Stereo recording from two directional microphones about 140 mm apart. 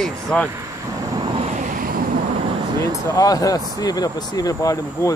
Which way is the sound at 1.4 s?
60° right (ahead or behind).